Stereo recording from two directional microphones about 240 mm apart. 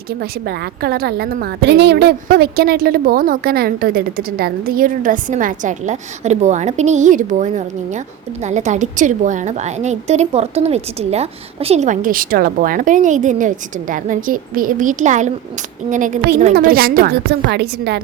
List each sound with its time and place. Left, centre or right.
0.2 s a woman's voice: right